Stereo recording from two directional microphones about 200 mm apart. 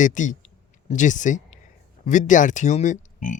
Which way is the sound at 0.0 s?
40° left (ahead or behind).